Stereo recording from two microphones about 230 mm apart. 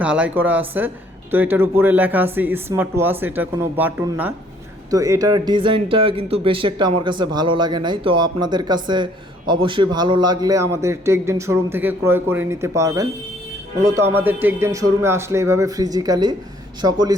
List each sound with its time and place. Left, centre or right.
0.0 s a man's voice: centre